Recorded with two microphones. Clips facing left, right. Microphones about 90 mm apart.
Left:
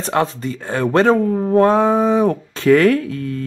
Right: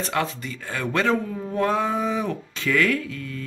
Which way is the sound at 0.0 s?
35° left (ahead or behind).